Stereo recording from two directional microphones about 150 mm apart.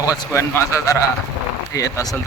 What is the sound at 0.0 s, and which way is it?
Speech, 25° left (ahead or behind).